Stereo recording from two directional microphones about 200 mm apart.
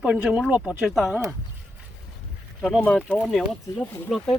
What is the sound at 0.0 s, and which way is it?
Speech, 5° right (ahead or behind).